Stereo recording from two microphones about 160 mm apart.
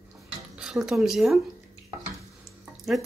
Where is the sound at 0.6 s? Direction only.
5° right (ahead or behind).